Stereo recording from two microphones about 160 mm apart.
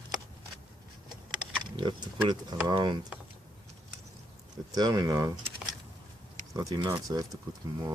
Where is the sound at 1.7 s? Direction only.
30° right (ahead or behind).